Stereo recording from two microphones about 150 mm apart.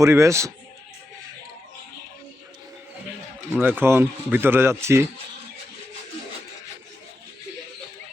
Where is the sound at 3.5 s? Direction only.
10° right (ahead or behind).